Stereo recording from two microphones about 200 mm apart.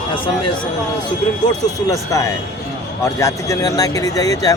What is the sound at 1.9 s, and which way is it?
Speech, 15° left (ahead or behind).